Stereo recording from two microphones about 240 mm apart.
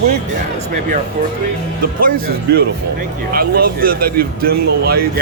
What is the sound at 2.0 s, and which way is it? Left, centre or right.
Speech, right.